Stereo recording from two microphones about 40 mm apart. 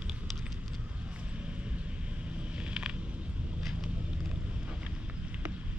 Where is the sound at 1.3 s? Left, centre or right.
Right.